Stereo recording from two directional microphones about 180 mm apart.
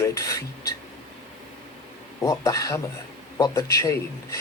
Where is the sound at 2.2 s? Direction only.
15° left (ahead or behind).